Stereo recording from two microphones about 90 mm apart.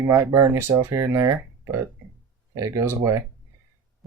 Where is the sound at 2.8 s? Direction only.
30° right (ahead or behind).